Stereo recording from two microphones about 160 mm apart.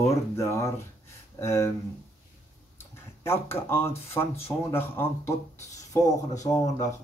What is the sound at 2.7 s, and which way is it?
Speech, 15° left (ahead or behind).